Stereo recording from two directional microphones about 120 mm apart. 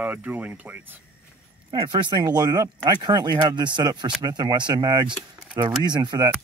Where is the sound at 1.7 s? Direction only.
40° right (ahead or behind).